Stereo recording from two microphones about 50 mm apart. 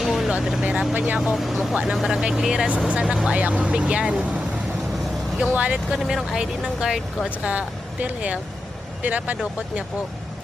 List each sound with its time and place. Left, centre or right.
0.0 s vehicle: centre
0.6 s speech: right
1.2 s speech: centre
1.7 s speech: centre
2.0 s speech: centre
2.6 s speech: right
5.5 s speech: right
6.0 s speech: centre
6.3 s speech: centre
7.4 s speech: right